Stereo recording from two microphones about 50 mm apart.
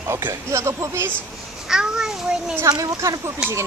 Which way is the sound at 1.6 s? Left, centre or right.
Centre.